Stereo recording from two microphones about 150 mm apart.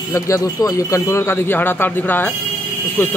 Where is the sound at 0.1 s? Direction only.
20° left (ahead or behind).